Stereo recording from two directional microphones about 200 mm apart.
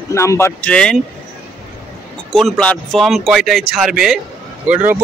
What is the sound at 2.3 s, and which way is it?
Speech, 5° left (ahead or behind).